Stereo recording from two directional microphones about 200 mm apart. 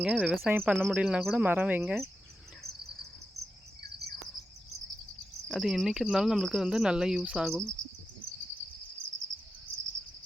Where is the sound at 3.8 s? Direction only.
50° right (ahead or behind).